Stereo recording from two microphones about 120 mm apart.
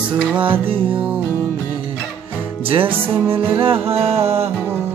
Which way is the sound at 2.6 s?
50° right (ahead or behind).